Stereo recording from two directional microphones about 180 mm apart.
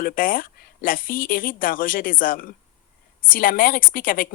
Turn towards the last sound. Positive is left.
turn(degrees=50)  # may be behind; listen again after turning